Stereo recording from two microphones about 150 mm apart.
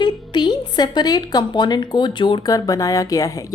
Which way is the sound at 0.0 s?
30° left (ahead or behind).